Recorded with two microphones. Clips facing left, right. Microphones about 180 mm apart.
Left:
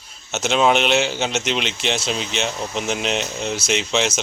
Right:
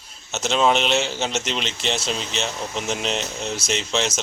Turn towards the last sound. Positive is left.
turn(degrees=0)  # may be behind; listen again after turning